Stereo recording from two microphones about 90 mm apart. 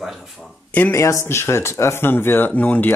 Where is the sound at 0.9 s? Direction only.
35° left (ahead or behind).